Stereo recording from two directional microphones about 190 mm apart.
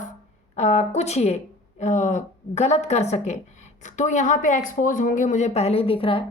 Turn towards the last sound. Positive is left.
turn(degrees=30)  # may be behind; listen again after turning